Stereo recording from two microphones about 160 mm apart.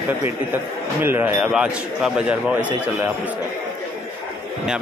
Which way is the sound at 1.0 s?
10° right (ahead or behind).